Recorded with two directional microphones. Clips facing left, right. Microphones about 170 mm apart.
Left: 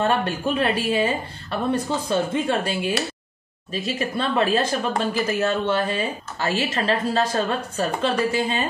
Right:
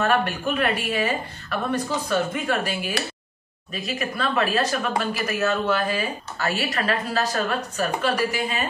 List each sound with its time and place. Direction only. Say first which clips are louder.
0.0 s speech: left 1 dB; 25° left (ahead or behind)